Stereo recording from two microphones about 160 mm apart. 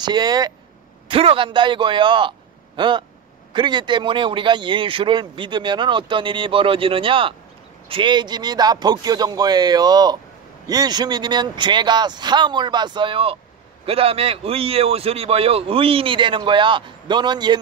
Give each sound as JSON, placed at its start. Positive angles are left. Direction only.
{"t": 0.0, "sound": "a man's voice", "side_deg": -25}